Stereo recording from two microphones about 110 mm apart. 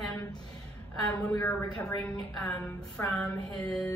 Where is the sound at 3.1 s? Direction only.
15° left (ahead or behind).